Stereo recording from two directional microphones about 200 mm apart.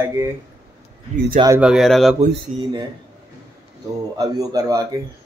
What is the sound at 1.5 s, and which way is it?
Speech, 5° right (ahead or behind).